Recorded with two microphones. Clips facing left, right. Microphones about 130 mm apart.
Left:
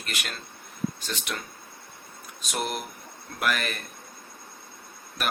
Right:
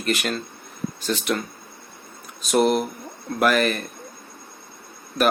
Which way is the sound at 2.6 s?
35° right (ahead or behind).